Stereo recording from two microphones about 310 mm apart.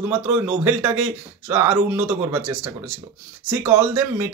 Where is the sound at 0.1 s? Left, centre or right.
Centre.